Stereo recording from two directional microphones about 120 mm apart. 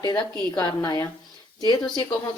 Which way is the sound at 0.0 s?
35° left (ahead or behind).